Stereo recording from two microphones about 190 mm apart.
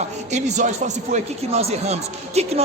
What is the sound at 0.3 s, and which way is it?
Speech, 35° right (ahead or behind).